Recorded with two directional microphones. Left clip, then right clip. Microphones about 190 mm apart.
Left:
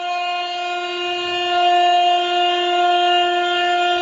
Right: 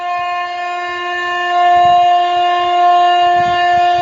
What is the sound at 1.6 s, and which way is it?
Wind instrument, 20° right (ahead or behind).